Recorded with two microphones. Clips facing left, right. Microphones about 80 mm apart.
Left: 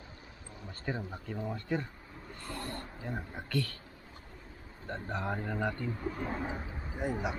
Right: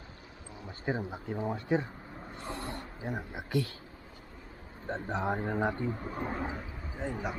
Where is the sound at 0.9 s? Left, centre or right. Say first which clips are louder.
Right 4 dB; centre.